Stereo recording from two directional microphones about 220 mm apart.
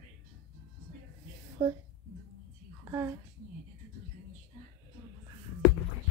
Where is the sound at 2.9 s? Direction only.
15° right (ahead or behind).